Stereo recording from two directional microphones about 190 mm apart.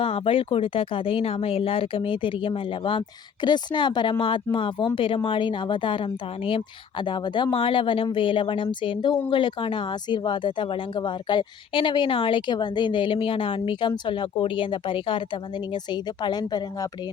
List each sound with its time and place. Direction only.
0.0 s speech: 30° left (ahead or behind)